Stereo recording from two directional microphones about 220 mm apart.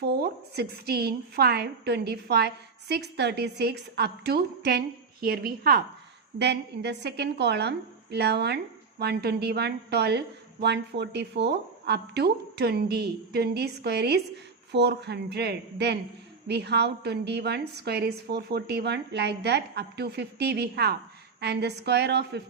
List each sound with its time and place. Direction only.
0.0 s a woman's voice: 45° right (ahead or behind)